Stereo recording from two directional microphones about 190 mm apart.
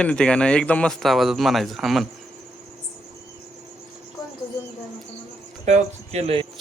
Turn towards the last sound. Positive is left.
turn(degrees=-30)  # may be behind; listen again after turning